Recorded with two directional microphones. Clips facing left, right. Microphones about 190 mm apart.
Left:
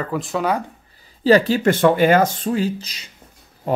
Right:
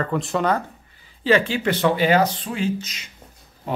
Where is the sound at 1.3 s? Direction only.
40° left (ahead or behind).